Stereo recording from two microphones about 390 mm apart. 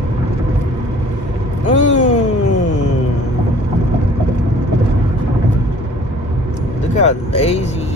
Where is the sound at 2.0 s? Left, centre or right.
Centre.